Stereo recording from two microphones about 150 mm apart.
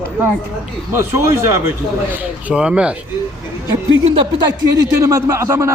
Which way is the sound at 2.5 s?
5° right (ahead or behind).